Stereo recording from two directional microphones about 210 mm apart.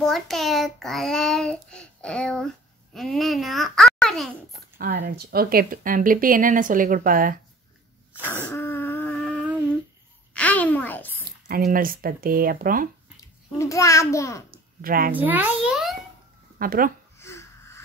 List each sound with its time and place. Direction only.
0.0 s a child's voice: centre (ahead or behind)
4.5 s speech: 45° right (ahead or behind)
8.5 s a sound: 10° left (ahead or behind)
11.2 s speech: 45° right (ahead or behind)
13.6 s a child's voice: 15° left (ahead or behind)
14.5 s a sound: 45° right (ahead or behind)
15.1 s a child's voice: 10° right (ahead or behind)
16.5 s speech: 45° right (ahead or behind)
17.2 s wheeze: 10° left (ahead or behind)